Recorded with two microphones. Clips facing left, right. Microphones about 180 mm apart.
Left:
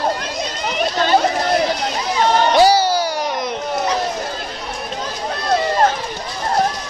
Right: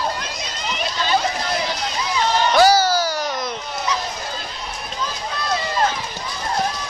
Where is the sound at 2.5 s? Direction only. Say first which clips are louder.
Right 1 dB; 30° left (ahead or behind).